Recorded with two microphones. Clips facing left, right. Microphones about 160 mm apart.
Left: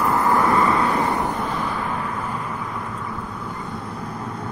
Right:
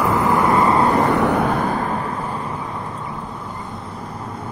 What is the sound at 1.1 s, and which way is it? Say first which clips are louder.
Vehicle: right 7 dB; 70° right (ahead or behind).